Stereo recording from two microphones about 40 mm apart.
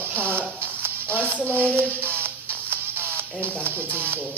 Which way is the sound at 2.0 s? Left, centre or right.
Right.